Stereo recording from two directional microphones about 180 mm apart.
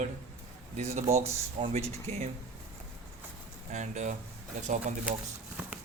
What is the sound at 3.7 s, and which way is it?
Speech, 40° right (ahead or behind).